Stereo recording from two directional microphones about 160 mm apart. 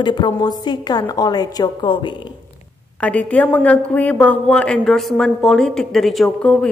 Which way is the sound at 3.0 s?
10° left (ahead or behind).